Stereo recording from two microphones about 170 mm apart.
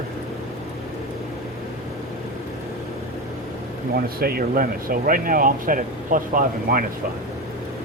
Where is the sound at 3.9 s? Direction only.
60° right (ahead or behind).